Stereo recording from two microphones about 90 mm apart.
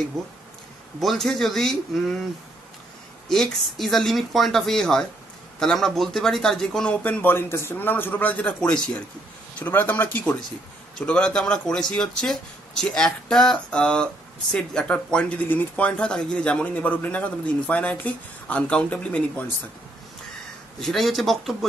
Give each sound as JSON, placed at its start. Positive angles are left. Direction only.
{"t": 1.0, "sound": "speech", "side_deg": 5}
{"t": 3.3, "sound": "speech", "side_deg": 5}
{"t": 8.5, "sound": "speech", "side_deg": 10}
{"t": 9.6, "sound": "speech", "side_deg": 20}
{"t": 11.0, "sound": "speech", "side_deg": 10}
{"t": 20.8, "sound": "speech", "side_deg": 0}